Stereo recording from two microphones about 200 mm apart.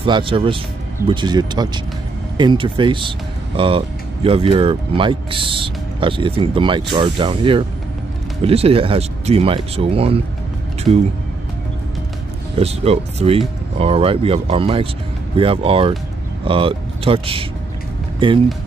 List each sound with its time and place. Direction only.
0.0 s speech: 25° right (ahead or behind)
12.5 s speech: 30° right (ahead or behind)